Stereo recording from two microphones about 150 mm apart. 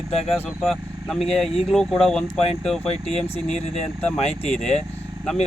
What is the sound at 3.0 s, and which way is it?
Speech, 45° left (ahead or behind).